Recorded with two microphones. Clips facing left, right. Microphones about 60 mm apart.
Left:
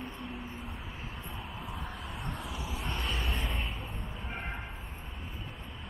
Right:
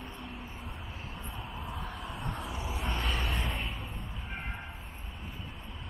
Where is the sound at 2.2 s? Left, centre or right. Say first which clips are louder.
Right 2 dB; right.